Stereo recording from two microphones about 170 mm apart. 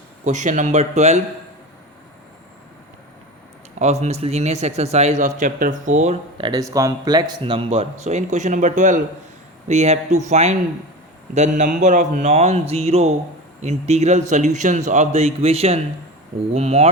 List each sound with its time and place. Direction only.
0.3 s a man's voice: 45° right (ahead or behind)
3.8 s speech: 40° right (ahead or behind)
6.4 s a man's voice: 20° right (ahead or behind); by 16.9 s 35° right (ahead or behind)